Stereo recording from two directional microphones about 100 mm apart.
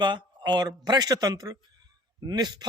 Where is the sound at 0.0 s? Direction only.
45° right (ahead or behind).